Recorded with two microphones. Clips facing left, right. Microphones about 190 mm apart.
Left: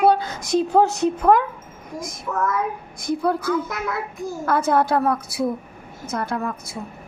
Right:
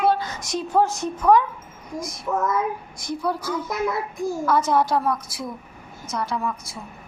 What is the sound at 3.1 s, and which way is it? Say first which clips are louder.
A woman's voice: left 5 dB; 55° left (ahead or behind).